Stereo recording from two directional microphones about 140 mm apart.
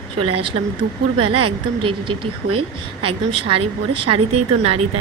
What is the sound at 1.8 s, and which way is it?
A woman's voice, 40° right (ahead or behind).